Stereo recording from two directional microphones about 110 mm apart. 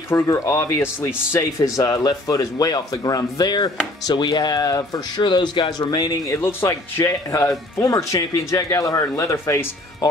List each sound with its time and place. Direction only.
0.1 s speech: 25° left (ahead or behind)
5.2 s speech: 45° left (ahead or behind)
6.2 s speech: 25° left (ahead or behind)